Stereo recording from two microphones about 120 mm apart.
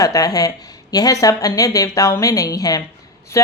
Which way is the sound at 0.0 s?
30° left (ahead or behind).